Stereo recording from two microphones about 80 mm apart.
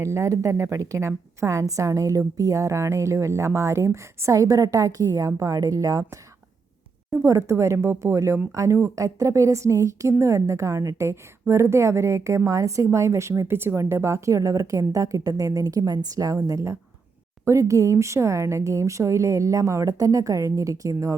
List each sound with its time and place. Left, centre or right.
0.0 s a woman's voice: right
7.3 s a woman's voice: right